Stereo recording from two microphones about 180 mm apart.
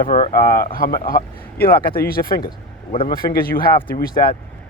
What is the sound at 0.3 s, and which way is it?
Speech, 55° left (ahead or behind).